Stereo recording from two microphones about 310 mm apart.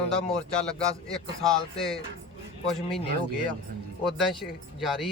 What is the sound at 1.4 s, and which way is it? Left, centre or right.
Speech, centre.